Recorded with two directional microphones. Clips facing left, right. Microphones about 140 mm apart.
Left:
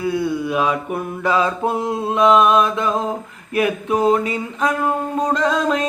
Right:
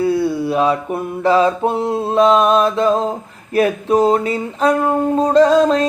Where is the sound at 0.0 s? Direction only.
30° right (ahead or behind).